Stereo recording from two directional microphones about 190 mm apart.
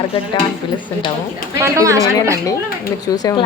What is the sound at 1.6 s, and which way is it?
Speech, 15° right (ahead or behind).